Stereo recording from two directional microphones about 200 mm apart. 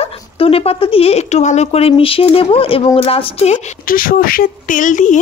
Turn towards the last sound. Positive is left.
turn(degrees=40)  # may be behind; listen again after turning